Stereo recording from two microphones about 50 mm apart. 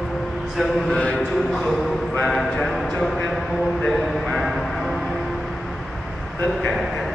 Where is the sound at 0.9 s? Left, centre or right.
Left.